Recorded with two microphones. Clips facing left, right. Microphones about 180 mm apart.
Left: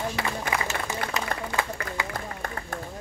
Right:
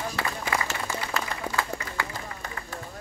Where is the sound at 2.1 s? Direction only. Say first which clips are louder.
Left 4 dB; 55° left (ahead or behind).